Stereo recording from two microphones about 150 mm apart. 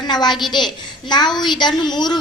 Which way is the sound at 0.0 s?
30° left (ahead or behind).